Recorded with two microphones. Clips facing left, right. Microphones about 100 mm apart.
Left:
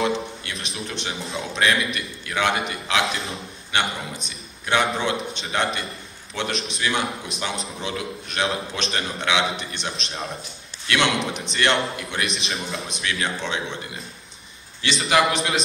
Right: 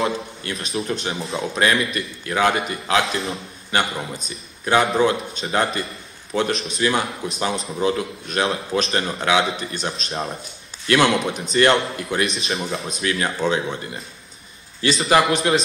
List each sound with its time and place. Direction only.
0.0 s a man's voice: 35° right (ahead or behind)
11.3 s a man's voice: 40° right (ahead or behind)
14.8 s a man's voice: 35° right (ahead or behind)